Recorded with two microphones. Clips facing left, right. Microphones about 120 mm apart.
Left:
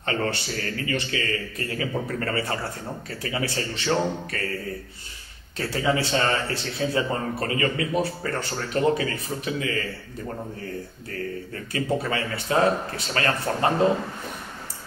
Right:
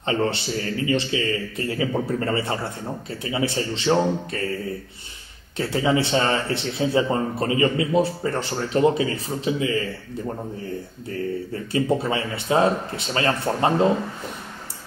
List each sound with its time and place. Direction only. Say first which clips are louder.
0.0 s speech: right 4 dB; 25° right (ahead or behind)
5.6 s speech: right 3 dB; 25° right (ahead or behind)
11.1 s speech: right 6 dB; 25° right (ahead or behind)